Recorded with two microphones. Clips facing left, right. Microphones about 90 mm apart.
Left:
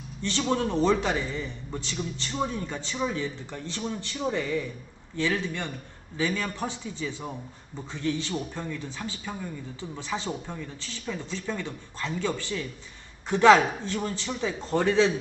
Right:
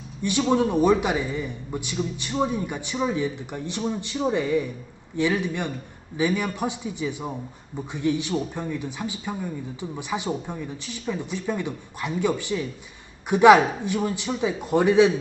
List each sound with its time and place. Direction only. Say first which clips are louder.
0.2 s speech: right 5 dB; 15° right (ahead or behind)